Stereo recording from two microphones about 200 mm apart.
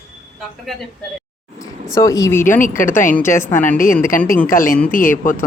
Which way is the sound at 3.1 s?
10° left (ahead or behind).